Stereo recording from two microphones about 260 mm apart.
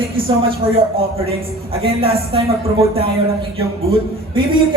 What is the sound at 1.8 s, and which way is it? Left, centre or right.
Speech, right.